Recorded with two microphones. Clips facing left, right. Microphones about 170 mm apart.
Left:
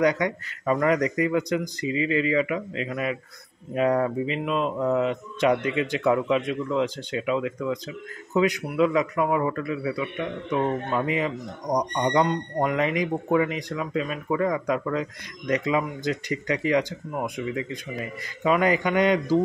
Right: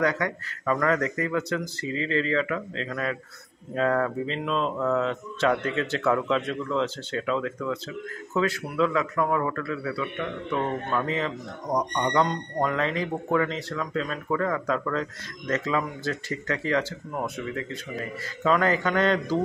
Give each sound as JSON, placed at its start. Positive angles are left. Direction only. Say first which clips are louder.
{"t": 0.0, "sound": "speech", "louder": "left 3 dB", "side_deg": 20}